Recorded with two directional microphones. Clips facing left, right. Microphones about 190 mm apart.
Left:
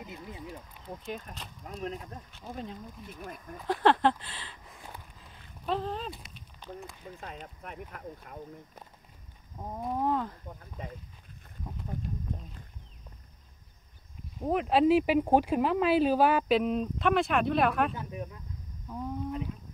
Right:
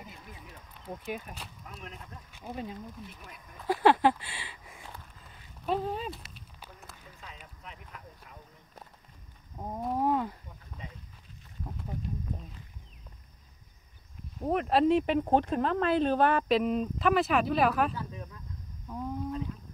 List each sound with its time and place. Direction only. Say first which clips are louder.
0.0 s a sound: left 6 dB; 20° left (ahead or behind)
0.8 s speech: right 2 dB; 5° right (ahead or behind)
1.6 s speech: left 9 dB; 35° left (ahead or behind)
2.3 s speech: right 2 dB; 10° right (ahead or behind)
5.2 s a sound: right 2 dB; 5° right (ahead or behind)
7.2 s speech: left 7 dB; 50° left (ahead or behind)
9.6 s speech: right 1 dB; 10° right (ahead or behind)
10.4 s speech: left 5 dB; 50° left (ahead or behind)
14.4 s speech: left 1 dB; centre (ahead or behind)
17.9 s speech: left 2 dB; 20° left (ahead or behind)
18.9 s speech: even; centre (ahead or behind)